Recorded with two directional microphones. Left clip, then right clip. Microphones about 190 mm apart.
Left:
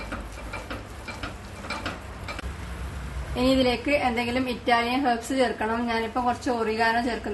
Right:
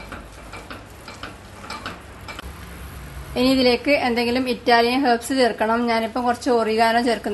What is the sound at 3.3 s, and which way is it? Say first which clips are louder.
A woman's voice: right 5 dB; 40° right (ahead or behind).